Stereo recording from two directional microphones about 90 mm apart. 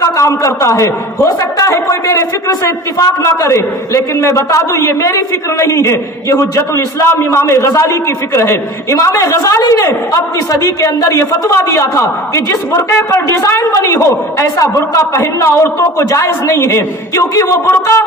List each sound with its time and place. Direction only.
0.0 s a man's voice: 35° left (ahead or behind)